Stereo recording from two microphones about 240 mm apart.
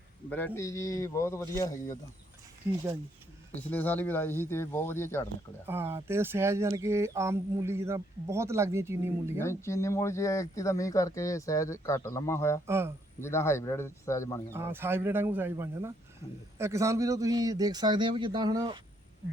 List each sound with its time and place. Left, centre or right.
0.3 s speech: centre
3.7 s speech: centre
5.6 s speech: centre
9.4 s speech: centre
12.6 s speech: centre
13.2 s speech: centre
14.5 s speech: centre